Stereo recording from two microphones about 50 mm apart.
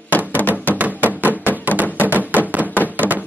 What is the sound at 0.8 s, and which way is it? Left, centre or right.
Music, right.